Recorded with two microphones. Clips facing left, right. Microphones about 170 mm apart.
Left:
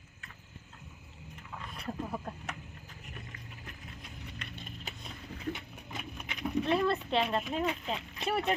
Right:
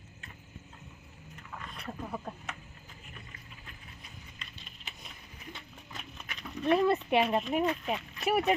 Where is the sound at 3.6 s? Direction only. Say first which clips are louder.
Left 4 dB; 70° left (ahead or behind).